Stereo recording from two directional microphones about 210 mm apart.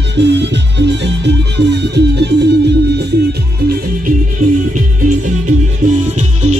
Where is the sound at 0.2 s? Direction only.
55° right (ahead or behind).